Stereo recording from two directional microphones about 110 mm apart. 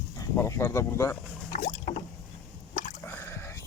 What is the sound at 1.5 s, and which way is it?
Rowboat, 90° left.